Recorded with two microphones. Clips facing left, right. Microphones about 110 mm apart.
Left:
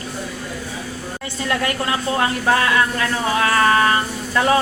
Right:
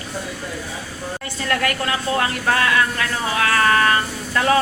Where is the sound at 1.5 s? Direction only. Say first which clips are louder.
Even; 25° left (ahead or behind).